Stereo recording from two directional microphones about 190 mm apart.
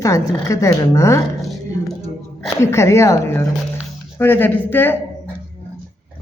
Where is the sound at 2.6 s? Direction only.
15° left (ahead or behind).